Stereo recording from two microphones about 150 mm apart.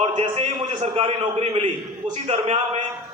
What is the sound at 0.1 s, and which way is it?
A man's voice, 40° right (ahead or behind).